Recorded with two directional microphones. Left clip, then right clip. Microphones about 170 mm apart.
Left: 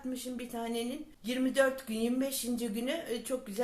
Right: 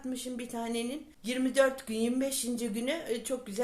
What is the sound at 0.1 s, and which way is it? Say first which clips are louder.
Speech: right 2 dB; 40° right (ahead or behind).